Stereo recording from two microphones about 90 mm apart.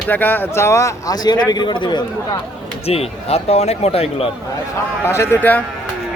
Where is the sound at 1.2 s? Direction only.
50° left (ahead or behind).